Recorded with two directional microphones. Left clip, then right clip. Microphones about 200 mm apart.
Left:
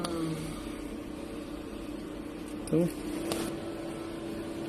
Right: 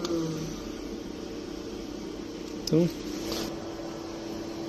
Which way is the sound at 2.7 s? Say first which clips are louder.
Right 3 dB; 15° right (ahead or behind).